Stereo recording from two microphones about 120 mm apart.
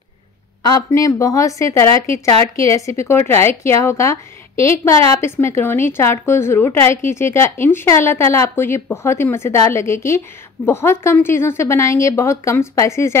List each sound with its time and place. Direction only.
0.7 s a woman's voice: 30° left (ahead or behind)